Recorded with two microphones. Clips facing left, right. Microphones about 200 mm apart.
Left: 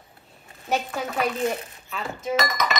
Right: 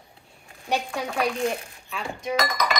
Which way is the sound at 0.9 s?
5° left (ahead or behind).